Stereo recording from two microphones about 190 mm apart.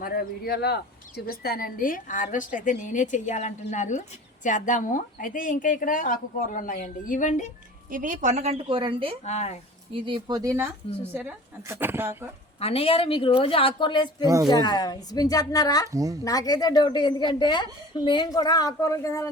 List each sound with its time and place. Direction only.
0.0 s speech: 55° left (ahead or behind)
7.9 s a woman's voice: 45° right (ahead or behind); by 9.1 s 25° right (ahead or behind)
9.2 s speech: 35° left (ahead or behind)
9.9 s speech: 25° right (ahead or behind)
12.5 s a woman's voice: 30° left (ahead or behind)
15.9 s speech: 15° right (ahead or behind)
16.2 s a woman's voice: 20° left (ahead or behind)